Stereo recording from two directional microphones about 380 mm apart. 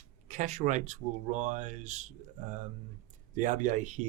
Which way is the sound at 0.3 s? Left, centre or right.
Centre.